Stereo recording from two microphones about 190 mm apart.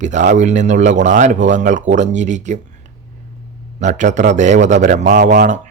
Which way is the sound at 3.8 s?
40° right (ahead or behind).